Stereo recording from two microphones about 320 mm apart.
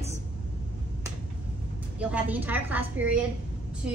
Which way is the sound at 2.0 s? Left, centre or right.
Centre.